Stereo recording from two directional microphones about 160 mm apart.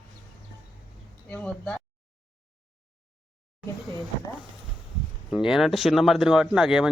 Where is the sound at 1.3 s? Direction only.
10° left (ahead or behind).